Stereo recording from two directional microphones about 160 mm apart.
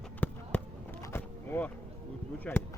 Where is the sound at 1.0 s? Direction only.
15° left (ahead or behind).